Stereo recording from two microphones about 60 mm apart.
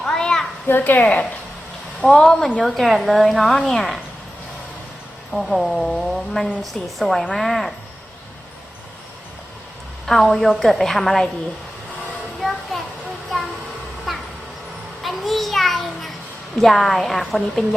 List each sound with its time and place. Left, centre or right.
0.0 s a sound: centre
0.7 s speech: left
2.0 s a woman's voice: centre
5.3 s speech: centre
10.1 s speech: centre
12.4 s a sound: centre
14.1 s cat: centre
15.0 s a sound: centre
16.6 s speech: centre